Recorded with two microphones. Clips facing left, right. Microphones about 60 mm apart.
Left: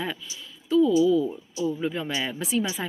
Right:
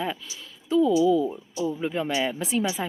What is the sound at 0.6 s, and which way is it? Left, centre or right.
Speech, right.